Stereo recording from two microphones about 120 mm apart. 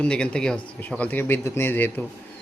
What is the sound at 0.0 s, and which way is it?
A man's voice, 10° left (ahead or behind).